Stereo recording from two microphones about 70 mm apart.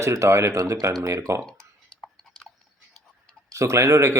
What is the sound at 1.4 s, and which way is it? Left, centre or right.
Whispering, centre.